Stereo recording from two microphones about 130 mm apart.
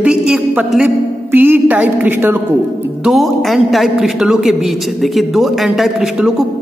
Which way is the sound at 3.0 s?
Centre (ahead or behind).